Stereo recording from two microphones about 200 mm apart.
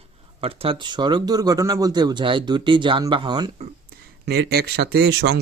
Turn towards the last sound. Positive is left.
turn(degrees=-55)  # may be behind; listen again after turning